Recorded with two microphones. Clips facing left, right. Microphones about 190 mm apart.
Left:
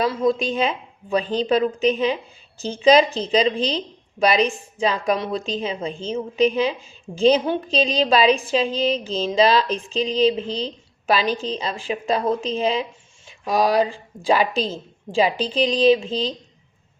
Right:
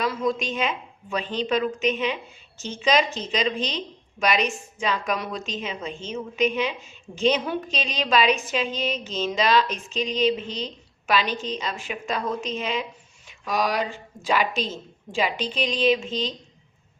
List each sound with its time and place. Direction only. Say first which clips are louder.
0.0 s a woman's voice: left 5 dB; 30° left (ahead or behind)